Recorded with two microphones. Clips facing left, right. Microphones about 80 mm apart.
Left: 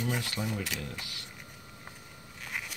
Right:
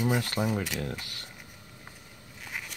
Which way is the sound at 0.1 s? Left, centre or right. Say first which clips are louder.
Right 6 dB; right.